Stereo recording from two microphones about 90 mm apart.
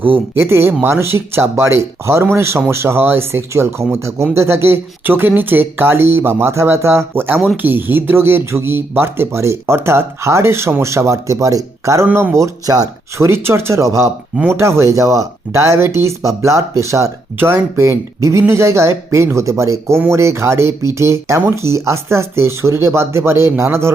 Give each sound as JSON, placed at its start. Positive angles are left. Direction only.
{"t": 0.3, "sound": "speech", "side_deg": -30}
{"t": 12.0, "sound": "speech", "side_deg": -20}
{"t": 12.3, "sound": "speech", "side_deg": -40}
{"t": 13.1, "sound": "speech", "side_deg": -30}